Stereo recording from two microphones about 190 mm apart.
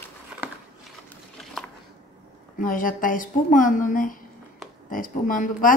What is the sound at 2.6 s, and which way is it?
A woman's voice, 45° left (ahead or behind).